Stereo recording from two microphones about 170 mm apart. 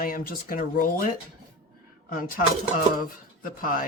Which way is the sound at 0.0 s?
55° left (ahead or behind).